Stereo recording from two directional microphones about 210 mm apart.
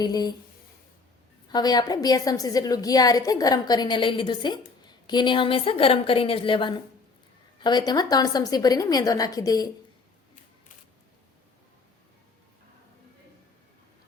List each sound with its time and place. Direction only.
0.0 s a woman's voice: 20° left (ahead or behind)
1.5 s a woman's voice: 20° left (ahead or behind)